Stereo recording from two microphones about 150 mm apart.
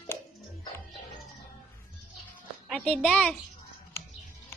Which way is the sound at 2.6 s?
5° left (ahead or behind).